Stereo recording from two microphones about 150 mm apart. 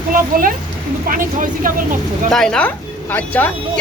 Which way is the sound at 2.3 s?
5° left (ahead or behind).